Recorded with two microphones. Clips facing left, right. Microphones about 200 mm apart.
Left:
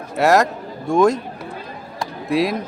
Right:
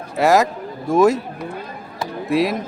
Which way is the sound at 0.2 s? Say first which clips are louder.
Even; centre (ahead or behind).